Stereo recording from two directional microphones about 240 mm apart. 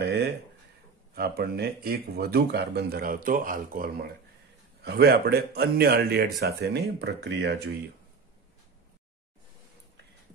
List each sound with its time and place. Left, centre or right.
0.0 s speech: right